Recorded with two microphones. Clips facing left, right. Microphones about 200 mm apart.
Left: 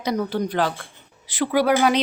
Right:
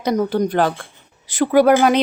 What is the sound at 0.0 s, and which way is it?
Speech, 50° right (ahead or behind).